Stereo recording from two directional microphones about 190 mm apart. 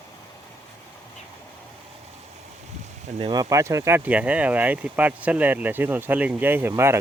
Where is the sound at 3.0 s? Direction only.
35° right (ahead or behind).